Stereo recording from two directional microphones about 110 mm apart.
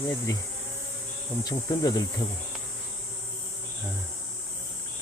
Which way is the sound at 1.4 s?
40° left (ahead or behind).